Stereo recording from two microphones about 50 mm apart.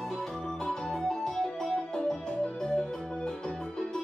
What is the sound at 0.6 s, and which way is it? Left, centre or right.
Organ, centre.